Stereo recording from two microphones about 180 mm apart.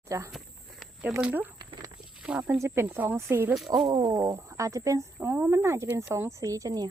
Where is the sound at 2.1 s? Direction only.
5° right (ahead or behind).